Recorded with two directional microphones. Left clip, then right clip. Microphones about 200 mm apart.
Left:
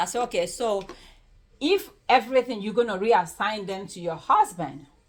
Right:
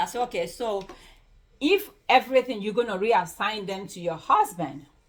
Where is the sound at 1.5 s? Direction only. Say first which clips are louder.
Right 1 dB; 15° left (ahead or behind).